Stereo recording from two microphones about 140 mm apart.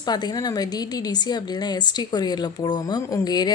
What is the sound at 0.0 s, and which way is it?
A woman's voice, 30° left (ahead or behind).